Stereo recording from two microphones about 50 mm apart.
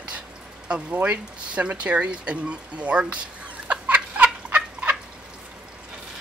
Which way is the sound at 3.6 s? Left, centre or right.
Right.